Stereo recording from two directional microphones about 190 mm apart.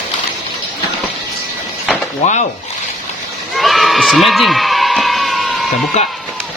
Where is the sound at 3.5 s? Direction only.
Centre (ahead or behind).